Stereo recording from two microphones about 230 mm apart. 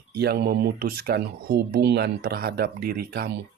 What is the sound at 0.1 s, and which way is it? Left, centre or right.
Speech, right.